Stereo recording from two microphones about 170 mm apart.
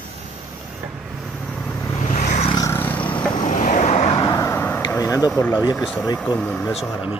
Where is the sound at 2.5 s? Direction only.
20° left (ahead or behind).